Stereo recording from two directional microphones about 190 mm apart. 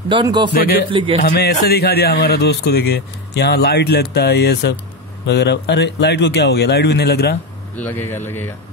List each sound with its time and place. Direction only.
0.1 s a man's voice: 25° right (ahead or behind)
1.2 s a man's voice: 60° left (ahead or behind)
7.7 s speech: 10° left (ahead or behind)